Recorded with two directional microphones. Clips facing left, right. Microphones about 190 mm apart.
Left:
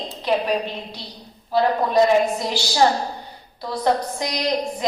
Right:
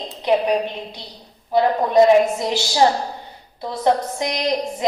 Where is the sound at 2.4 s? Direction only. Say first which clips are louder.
Right 1 dB; 20° right (ahead or behind).